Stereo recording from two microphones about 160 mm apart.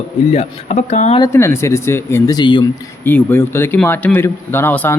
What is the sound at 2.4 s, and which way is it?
Speech, 30° left (ahead or behind).